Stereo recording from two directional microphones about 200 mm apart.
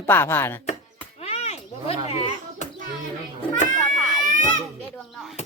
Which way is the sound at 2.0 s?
30° left (ahead or behind).